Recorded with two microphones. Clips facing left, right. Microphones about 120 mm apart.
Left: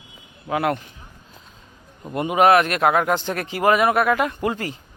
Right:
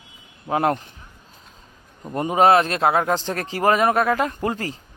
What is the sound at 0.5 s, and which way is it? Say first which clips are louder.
Speech: right 1 dB; 35° right (ahead or behind).